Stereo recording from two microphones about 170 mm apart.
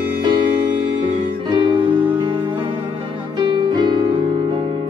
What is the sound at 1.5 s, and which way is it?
Music, 25° right (ahead or behind).